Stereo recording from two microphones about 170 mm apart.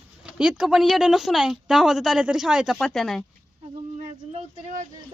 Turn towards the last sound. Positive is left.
turn(degrees=-45)  # may be behind; listen again after turning